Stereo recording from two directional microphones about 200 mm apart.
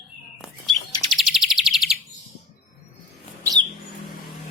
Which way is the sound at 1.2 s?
Centre (ahead or behind).